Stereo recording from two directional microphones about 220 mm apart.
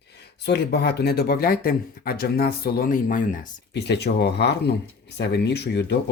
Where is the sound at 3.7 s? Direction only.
50° left (ahead or behind).